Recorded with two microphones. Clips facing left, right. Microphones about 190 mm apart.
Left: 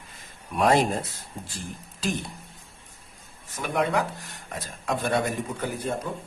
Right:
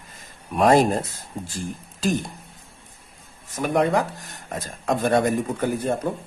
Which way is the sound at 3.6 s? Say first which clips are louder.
Right 5 dB; 40° right (ahead or behind).